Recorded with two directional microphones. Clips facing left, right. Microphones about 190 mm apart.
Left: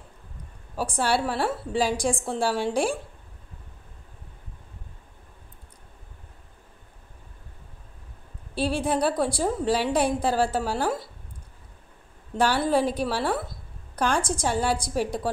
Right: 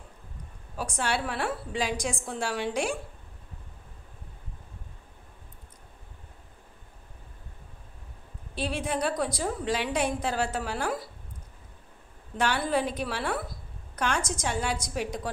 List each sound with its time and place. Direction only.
0.7 s a woman's voice: 35° left (ahead or behind)
8.5 s a woman's voice: 35° left (ahead or behind)
12.4 s a woman's voice: 30° left (ahead or behind)